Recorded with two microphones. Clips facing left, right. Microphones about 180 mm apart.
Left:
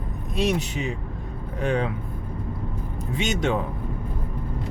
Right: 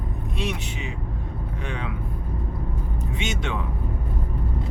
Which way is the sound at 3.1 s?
40° left (ahead or behind).